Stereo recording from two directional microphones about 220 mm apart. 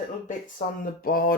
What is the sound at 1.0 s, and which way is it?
Speech, 40° left (ahead or behind).